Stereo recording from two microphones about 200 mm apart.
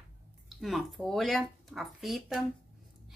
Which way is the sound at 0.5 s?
Centre (ahead or behind).